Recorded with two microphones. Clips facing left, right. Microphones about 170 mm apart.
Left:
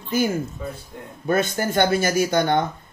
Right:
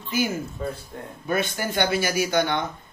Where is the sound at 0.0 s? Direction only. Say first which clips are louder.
Left 4 dB; 45° left (ahead or behind).